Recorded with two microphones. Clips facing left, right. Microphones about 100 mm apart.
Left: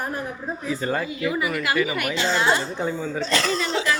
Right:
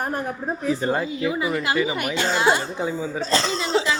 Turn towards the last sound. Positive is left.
turn(degrees=-30)  # may be behind; listen again after turning